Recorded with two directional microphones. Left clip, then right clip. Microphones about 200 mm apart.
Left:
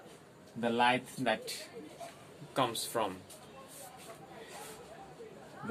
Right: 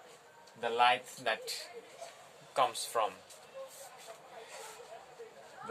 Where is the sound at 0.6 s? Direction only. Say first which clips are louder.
Right 1 dB; 20° right (ahead or behind).